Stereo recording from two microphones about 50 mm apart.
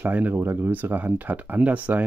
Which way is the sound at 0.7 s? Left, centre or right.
Right.